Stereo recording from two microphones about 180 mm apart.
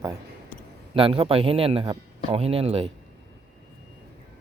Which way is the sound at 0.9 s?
30° right (ahead or behind).